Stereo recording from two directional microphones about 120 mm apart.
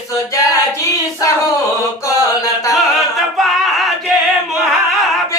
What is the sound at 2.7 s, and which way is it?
Singing, centre (ahead or behind).